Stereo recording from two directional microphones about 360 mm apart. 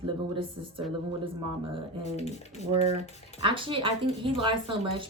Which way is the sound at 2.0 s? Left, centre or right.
Centre.